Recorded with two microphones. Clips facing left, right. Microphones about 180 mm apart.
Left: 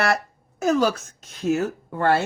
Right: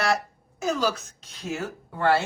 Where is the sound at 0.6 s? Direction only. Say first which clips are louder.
Left 5 dB; 55° left (ahead or behind).